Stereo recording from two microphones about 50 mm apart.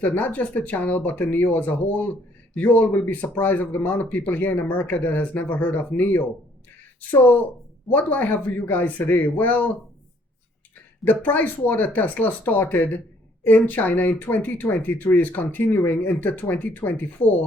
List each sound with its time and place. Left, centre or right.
0.0 s speech: left
11.0 s speech: left